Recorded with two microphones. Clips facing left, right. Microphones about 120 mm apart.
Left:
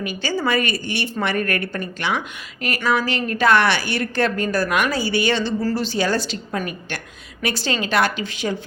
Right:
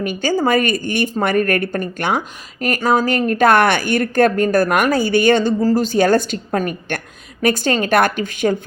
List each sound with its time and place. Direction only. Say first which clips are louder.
0.0 s a woman's voice: right 6 dB; 50° right (ahead or behind)